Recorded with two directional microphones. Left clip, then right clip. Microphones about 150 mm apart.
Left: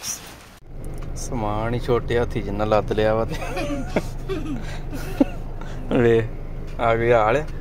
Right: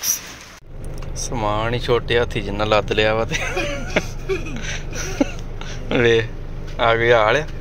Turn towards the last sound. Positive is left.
turn(degrees=10)  # may be behind; listen again after turning